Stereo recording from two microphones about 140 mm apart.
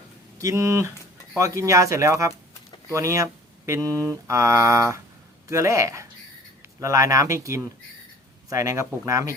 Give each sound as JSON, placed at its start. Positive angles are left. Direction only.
{"t": 0.3, "sound": "mantra", "side_deg": -20}